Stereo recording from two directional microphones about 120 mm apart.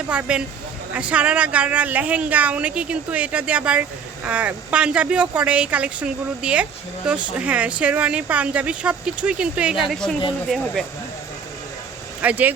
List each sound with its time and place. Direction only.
0.1 s speech: 10° right (ahead or behind)
12.2 s speech: 15° right (ahead or behind)